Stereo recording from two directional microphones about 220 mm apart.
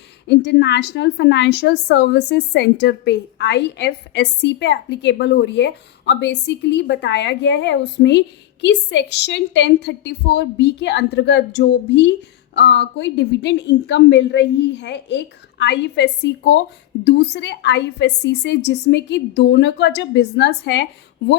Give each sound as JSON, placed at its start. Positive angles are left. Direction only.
{"t": 0.3, "sound": "a woman's voice", "side_deg": 50}